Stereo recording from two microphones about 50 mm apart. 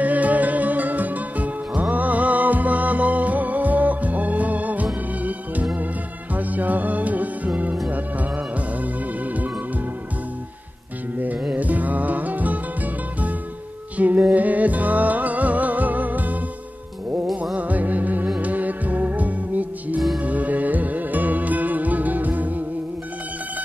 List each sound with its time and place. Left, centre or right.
0.0 s music: right
6.3 s music: right
11.5 s music: right
13.9 s music: right
17.6 s music: right